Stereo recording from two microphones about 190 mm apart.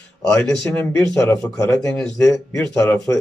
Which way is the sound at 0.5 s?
10° left (ahead or behind).